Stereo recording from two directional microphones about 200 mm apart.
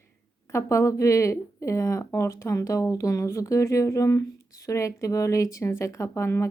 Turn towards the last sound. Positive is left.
turn(degrees=15)  # may be behind; listen again after turning